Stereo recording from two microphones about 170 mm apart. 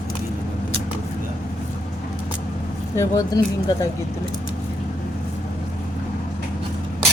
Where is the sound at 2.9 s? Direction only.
20° left (ahead or behind).